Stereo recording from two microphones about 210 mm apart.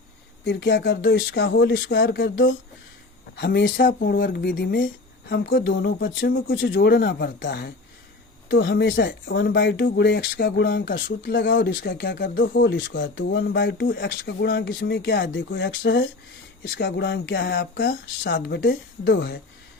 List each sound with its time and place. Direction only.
0.4 s speech: 65° left (ahead or behind)
3.3 s speech: 50° left (ahead or behind)